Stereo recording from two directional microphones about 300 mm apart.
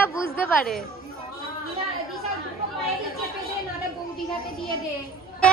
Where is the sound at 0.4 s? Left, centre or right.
Centre.